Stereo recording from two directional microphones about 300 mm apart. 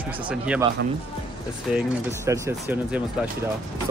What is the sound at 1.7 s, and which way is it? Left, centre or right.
Speech, centre.